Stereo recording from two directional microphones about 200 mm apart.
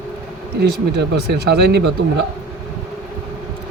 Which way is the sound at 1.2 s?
55° right (ahead or behind).